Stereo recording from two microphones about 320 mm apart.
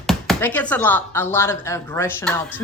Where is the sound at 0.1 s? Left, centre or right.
Centre.